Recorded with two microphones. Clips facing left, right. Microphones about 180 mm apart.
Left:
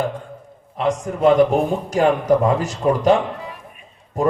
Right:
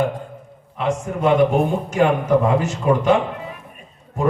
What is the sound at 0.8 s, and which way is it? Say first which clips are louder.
Speech: left 2 dB; 35° left (ahead or behind).